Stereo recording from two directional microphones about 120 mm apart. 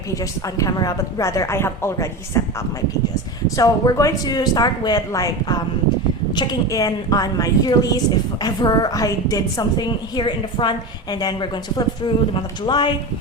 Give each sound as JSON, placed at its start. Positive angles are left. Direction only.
{"t": 0.1, "sound": "a woman's voice", "side_deg": 30}
{"t": 3.5, "sound": "a woman's voice", "side_deg": 30}